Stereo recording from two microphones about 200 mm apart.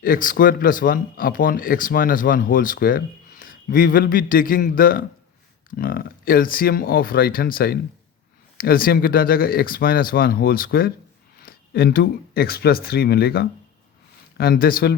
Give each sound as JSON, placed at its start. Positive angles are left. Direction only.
{"t": 0.0, "sound": "speech", "side_deg": 45}